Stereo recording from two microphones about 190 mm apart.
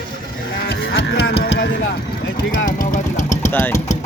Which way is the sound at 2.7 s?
45° left (ahead or behind).